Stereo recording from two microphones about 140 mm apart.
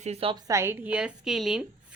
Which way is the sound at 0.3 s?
25° right (ahead or behind).